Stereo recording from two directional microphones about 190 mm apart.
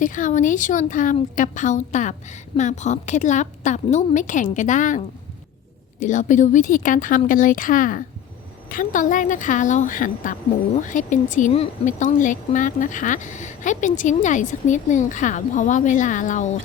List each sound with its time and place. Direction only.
0.0 s a woman's voice: 45° left (ahead or behind)